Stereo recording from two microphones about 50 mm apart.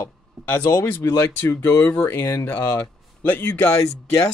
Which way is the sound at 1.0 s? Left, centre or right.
Left.